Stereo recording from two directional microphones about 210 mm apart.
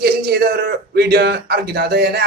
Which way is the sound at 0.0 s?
50° right (ahead or behind).